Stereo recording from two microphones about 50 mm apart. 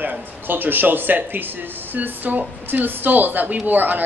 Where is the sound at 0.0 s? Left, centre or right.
Right.